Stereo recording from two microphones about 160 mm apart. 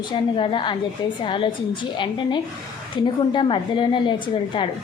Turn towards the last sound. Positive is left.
turn(degrees=30)  # may be behind; listen again after turning